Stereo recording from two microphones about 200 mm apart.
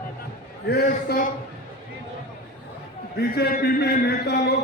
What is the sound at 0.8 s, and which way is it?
Speech, 45° left (ahead or behind).